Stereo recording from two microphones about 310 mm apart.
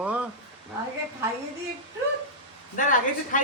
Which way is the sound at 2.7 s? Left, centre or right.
Left.